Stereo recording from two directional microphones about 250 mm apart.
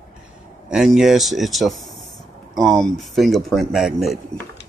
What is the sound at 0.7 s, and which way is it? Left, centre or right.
Speech, centre.